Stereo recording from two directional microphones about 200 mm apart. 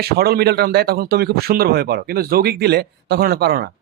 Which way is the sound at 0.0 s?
50° right (ahead or behind).